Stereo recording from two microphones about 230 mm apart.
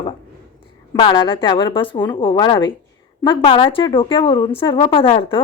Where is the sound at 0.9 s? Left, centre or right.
Centre.